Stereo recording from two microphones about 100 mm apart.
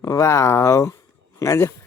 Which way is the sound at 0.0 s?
30° left (ahead or behind).